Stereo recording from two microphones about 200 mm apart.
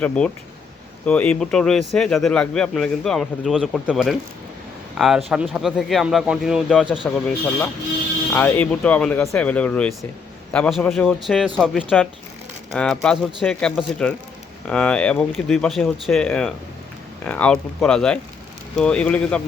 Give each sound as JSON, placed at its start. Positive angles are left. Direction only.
{"t": 1.0, "sound": "speech", "side_deg": 5}
{"t": 8.3, "sound": "speech", "side_deg": 10}